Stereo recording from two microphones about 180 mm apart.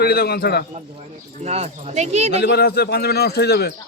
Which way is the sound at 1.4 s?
35° right (ahead or behind).